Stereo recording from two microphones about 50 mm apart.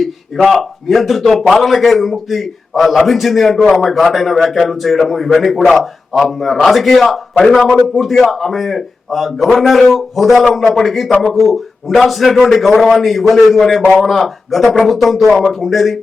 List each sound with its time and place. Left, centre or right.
0.4 s a man's voice: centre